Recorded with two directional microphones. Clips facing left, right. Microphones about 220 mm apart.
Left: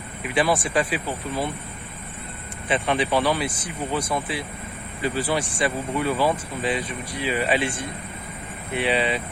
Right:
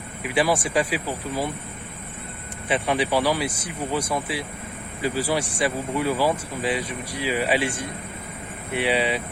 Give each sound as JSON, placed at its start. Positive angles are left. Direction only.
{"t": 0.3, "sound": "speech", "side_deg": -10}
{"t": 2.6, "sound": "speech", "side_deg": -10}